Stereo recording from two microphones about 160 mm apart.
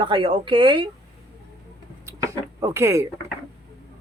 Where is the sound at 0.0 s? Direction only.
30° right (ahead or behind).